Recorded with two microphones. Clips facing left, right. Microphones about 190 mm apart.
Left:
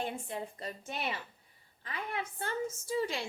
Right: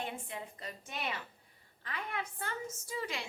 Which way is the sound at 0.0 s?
35° left (ahead or behind).